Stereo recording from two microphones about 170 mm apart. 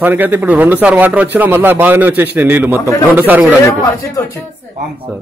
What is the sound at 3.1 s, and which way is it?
Speech, 10° right (ahead or behind).